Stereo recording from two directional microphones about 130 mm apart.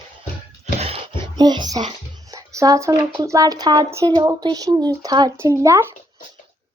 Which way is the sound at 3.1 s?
25° right (ahead or behind).